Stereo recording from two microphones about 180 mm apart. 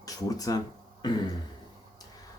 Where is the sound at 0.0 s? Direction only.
20° left (ahead or behind).